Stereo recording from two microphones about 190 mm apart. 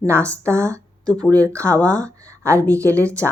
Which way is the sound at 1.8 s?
15° right (ahead or behind).